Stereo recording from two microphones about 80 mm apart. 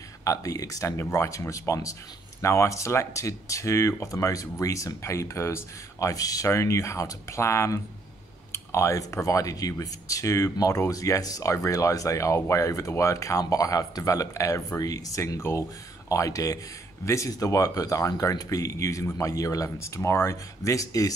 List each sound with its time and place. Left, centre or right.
0.2 s speech: left